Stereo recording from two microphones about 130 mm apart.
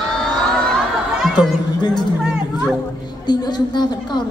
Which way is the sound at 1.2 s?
Centre (ahead or behind).